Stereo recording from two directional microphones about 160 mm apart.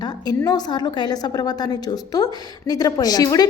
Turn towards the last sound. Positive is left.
turn(degrees=25)  # may be behind; listen again after turning